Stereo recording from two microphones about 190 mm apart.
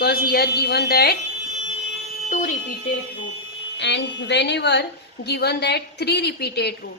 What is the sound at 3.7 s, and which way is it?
A woman's voice, 70° left (ahead or behind).